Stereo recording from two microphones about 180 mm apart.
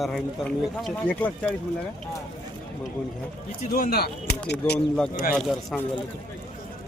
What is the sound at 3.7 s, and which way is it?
Speech, 55° left (ahead or behind).